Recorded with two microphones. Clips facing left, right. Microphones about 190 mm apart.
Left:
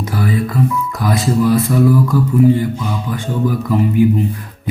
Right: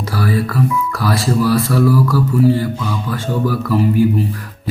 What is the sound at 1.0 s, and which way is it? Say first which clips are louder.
Speech: left 2 dB; 20° left (ahead or behind).